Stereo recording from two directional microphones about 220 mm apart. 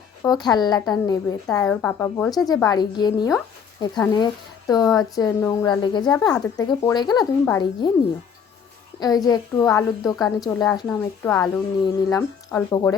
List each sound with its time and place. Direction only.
0.2 s a woman's voice: 20° left (ahead or behind)
9.0 s a woman's voice: 15° left (ahead or behind)